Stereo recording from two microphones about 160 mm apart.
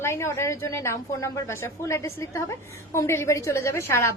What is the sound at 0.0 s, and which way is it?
A woman's voice, 15° left (ahead or behind).